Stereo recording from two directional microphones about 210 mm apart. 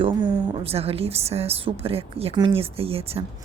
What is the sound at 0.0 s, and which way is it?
A woman's voice, 25° right (ahead or behind).